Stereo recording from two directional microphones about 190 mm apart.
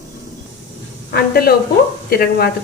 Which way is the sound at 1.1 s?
55° left (ahead or behind).